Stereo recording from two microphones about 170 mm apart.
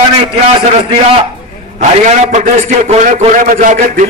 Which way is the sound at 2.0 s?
45° right (ahead or behind).